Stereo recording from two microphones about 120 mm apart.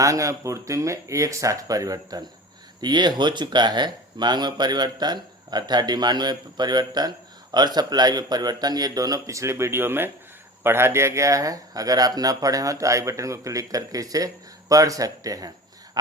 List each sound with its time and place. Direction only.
0.0 s speech: 25° right (ahead or behind)